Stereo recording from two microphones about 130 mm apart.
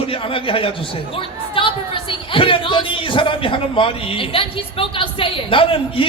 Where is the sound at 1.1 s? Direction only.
40° left (ahead or behind).